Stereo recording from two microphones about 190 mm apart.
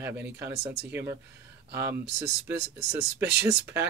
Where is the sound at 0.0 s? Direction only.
10° right (ahead or behind).